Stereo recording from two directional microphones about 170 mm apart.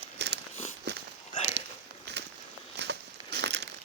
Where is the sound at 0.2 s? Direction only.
80° right.